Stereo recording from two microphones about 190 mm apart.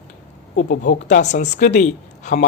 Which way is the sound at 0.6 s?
65° left (ahead or behind).